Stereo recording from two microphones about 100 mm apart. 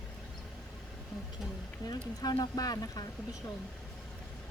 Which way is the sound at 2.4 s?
40° left (ahead or behind).